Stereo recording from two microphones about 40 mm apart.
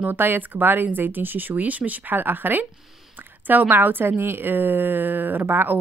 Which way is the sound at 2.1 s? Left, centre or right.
Right.